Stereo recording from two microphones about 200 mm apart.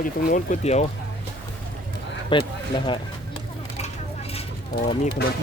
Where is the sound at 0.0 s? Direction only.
40° left (ahead or behind).